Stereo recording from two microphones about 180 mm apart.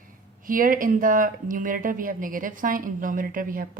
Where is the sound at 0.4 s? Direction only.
50° right (ahead or behind).